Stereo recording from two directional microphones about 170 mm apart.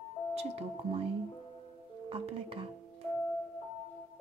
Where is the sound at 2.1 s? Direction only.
30° right (ahead or behind).